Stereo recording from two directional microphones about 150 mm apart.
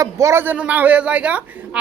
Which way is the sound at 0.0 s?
20° right (ahead or behind).